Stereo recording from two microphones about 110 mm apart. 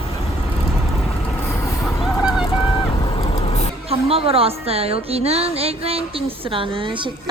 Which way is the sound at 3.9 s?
60° right (ahead or behind).